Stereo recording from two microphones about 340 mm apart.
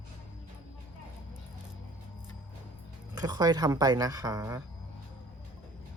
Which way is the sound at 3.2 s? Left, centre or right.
Centre.